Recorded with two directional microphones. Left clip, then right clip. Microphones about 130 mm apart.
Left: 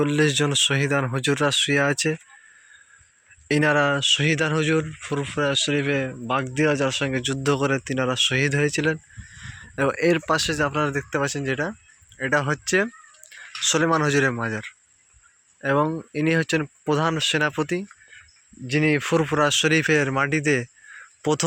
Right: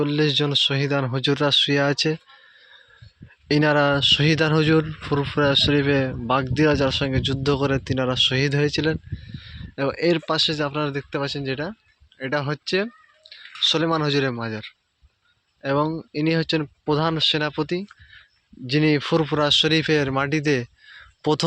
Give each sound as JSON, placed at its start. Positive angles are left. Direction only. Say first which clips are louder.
{"t": 0.0, "sound": "speech", "louder": "even", "side_deg": -5}
{"t": 3.5, "sound": "speech", "louder": "right 1 dB", "side_deg": -20}
{"t": 9.3, "sound": "speech", "louder": "left 3 dB", "side_deg": 0}
{"t": 18.7, "sound": "speech", "louder": "right 1 dB", "side_deg": -25}